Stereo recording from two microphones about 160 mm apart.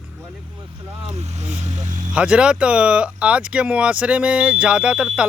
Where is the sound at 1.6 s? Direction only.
50° right (ahead or behind).